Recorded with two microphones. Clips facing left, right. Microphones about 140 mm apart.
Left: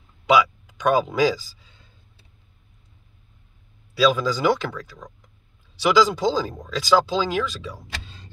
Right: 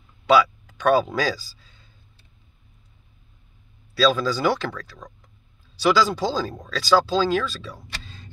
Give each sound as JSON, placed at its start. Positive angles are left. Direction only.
{"t": 0.3, "sound": "speech", "side_deg": 15}
{"t": 3.9, "sound": "speech", "side_deg": 15}
{"t": 5.8, "sound": "speech", "side_deg": 15}